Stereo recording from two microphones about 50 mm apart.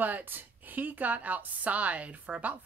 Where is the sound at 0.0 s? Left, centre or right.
Right.